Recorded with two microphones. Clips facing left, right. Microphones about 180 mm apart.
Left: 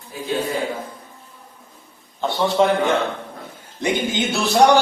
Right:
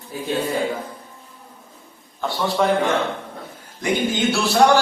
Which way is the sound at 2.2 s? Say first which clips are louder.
Left 3 dB; 20° left (ahead or behind).